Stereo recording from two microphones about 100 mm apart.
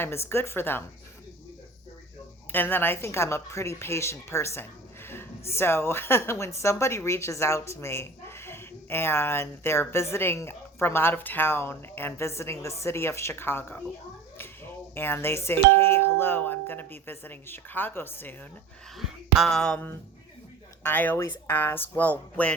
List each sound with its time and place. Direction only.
0.0 s speech: 25° left (ahead or behind)
2.5 s speech: 20° left (ahead or behind)
14.9 s speech: 20° left (ahead or behind)
18.9 s speech: 5° right (ahead or behind)
19.5 s speech: 10° left (ahead or behind)
20.9 s speech: 20° left (ahead or behind)